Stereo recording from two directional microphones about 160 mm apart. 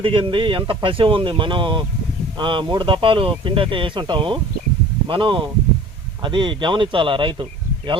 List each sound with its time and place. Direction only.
0.0 s speech: 30° right (ahead or behind)